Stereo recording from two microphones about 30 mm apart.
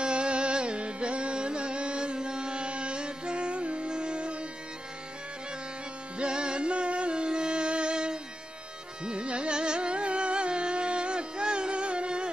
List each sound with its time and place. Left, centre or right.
0.0 s music: right
6.1 s music: right
9.0 s carnatic music: right